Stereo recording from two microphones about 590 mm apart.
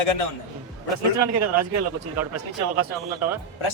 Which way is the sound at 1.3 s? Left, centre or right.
Right.